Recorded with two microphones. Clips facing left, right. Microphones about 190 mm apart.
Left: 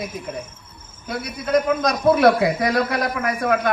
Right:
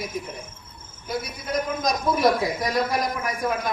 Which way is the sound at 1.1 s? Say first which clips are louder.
Left 6 dB; 65° left (ahead or behind).